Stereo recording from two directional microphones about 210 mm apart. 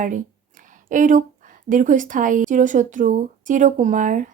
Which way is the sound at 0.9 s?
40° right (ahead or behind).